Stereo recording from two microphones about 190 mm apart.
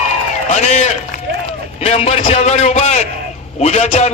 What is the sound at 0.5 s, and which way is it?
A man's voice, 40° left (ahead or behind).